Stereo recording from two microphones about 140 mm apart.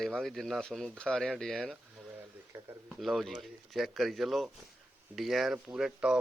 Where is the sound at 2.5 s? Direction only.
15° right (ahead or behind).